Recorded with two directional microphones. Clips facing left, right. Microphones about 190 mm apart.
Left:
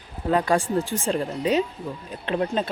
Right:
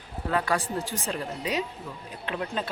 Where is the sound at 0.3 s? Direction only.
20° left (ahead or behind).